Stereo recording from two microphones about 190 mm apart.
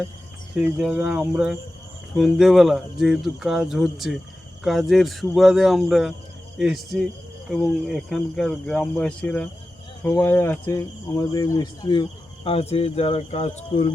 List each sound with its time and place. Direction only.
0.5 s speech: 5° right (ahead or behind); by 13.9 s 35° left (ahead or behind)